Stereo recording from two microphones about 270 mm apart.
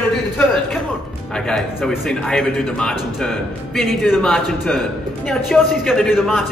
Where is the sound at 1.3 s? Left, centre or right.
Centre.